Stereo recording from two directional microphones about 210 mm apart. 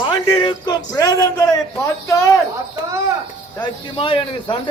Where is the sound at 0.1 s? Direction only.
20° left (ahead or behind).